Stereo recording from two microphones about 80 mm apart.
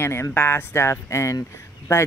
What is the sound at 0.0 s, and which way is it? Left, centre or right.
Speech, left.